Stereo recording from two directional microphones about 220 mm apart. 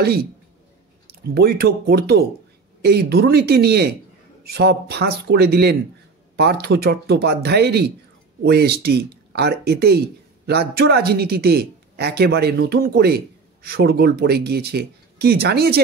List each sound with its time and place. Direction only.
0.0 s speech: 45° right (ahead or behind)
1.3 s speech: 45° right (ahead or behind)